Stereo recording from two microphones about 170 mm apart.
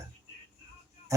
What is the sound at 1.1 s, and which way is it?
Speech, 20° right (ahead or behind).